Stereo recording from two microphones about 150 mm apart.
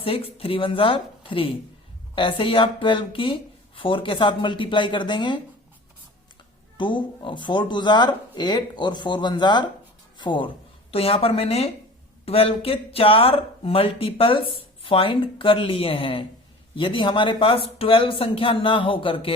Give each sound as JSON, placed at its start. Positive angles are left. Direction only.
{"t": 0.0, "sound": "speech", "side_deg": 40}
{"t": 6.7, "sound": "speech", "side_deg": 30}